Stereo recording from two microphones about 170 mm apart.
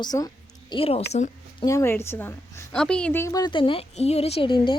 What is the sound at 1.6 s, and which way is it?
A woman's voice, 15° left (ahead or behind).